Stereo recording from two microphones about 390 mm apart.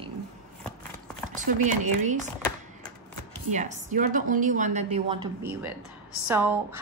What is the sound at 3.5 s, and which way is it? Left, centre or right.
A woman's voice, centre.